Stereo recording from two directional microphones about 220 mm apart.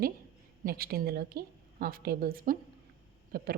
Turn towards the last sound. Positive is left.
turn(degrees=-40)  # may be behind; listen again after turning